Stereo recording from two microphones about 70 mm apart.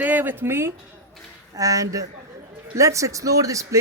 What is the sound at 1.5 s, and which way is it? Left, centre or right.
Speech, right.